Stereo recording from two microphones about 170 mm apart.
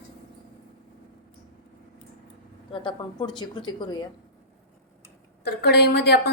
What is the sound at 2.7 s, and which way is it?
Speech, 30° left (ahead or behind).